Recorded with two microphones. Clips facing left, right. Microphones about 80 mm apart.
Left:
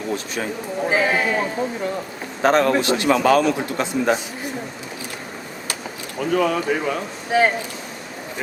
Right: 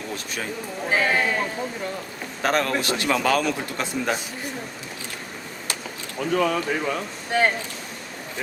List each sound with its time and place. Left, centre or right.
0.1 s a man's voice: left
0.9 s speech: centre
2.4 s a man's voice: left
6.1 s speech: centre